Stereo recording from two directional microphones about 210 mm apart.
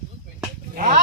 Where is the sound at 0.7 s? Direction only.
35° right (ahead or behind).